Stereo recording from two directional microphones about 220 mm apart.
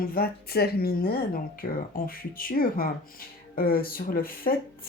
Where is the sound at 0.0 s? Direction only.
45° left (ahead or behind).